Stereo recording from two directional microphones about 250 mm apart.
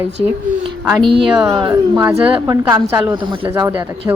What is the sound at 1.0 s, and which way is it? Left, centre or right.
Speech, right.